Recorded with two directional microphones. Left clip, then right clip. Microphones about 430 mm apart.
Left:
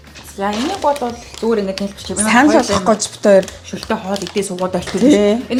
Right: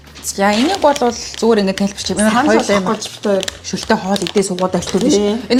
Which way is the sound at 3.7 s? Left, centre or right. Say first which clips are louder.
Right 4 dB; right.